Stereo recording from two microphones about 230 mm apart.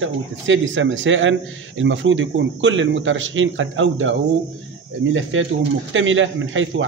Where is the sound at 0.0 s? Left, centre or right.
Right.